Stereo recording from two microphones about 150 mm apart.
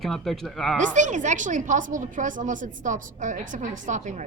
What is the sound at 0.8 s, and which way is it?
A woman's voice, 55° right (ahead or behind).